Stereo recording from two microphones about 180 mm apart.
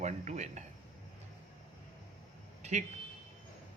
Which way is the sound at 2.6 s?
40° right (ahead or behind).